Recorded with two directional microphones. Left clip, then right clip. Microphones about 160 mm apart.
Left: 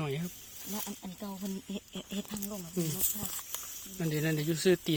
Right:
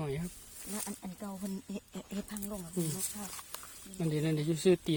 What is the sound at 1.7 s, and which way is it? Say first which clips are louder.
Speech: left 2 dB; 10° left (ahead or behind).